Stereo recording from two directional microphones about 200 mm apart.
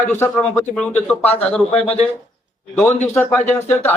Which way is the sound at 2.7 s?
10° left (ahead or behind).